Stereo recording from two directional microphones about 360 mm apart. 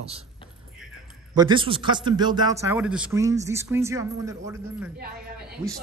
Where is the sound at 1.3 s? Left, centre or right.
Centre.